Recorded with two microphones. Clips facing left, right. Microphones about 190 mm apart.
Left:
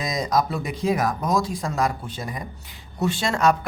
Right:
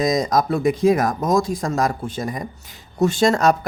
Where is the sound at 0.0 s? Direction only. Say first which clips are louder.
Right 5 dB; 45° right (ahead or behind).